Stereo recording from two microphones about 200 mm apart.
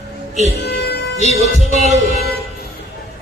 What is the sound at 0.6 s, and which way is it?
Music, 55° left (ahead or behind).